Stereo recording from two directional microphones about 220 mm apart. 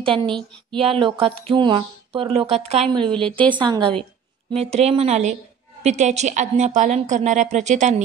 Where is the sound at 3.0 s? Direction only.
5° left (ahead or behind).